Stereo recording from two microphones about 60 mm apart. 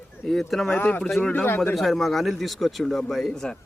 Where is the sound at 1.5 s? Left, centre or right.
Left.